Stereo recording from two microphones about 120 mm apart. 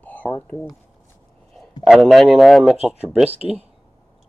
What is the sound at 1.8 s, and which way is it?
Speech, centre (ahead or behind).